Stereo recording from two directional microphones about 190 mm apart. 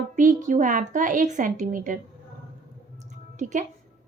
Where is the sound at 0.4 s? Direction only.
40° right (ahead or behind).